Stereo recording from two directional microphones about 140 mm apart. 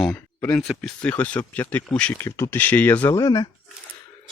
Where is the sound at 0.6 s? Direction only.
Centre (ahead or behind); by 3.5 s 25° left (ahead or behind).